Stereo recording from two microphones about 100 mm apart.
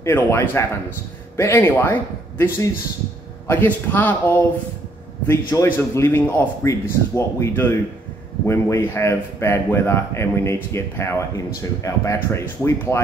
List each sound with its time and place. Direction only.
0.0 s a man's voice: 25° left (ahead or behind)